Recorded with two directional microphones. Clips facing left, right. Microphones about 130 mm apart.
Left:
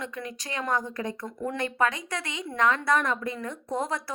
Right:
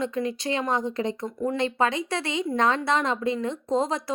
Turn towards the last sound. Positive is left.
turn(degrees=-20)  # may be behind; listen again after turning